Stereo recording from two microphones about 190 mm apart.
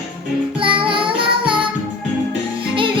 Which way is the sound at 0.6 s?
25° right (ahead or behind).